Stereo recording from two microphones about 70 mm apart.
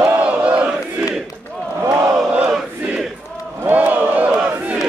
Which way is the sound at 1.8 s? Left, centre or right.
Right.